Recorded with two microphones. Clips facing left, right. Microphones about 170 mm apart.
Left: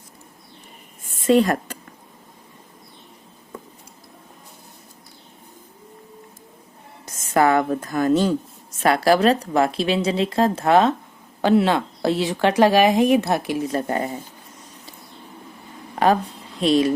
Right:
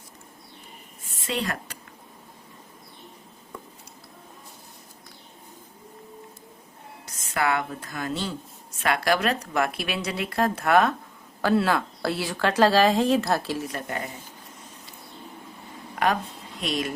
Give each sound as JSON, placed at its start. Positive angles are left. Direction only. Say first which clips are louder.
{"t": 1.1, "sound": "a sound", "louder": "left 13 dB", "side_deg": 45}
{"t": 7.0, "sound": "speech", "louder": "left 9 dB", "side_deg": 40}
{"t": 8.8, "sound": "speech", "louder": "left 7 dB", "side_deg": 35}
{"t": 13.7, "sound": "speech", "louder": "left 9 dB", "side_deg": 30}
{"t": 16.6, "sound": "speech", "louder": "left 11 dB", "side_deg": 30}